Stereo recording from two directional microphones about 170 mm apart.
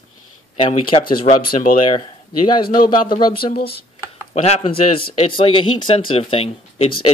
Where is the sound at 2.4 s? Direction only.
25° left (ahead or behind).